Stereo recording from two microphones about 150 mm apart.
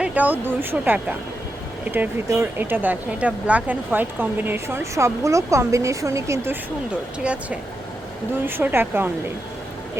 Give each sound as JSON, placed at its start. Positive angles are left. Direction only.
{"t": 0.0, "sound": "speech", "side_deg": -10}
{"t": 7.2, "sound": "speech", "side_deg": -10}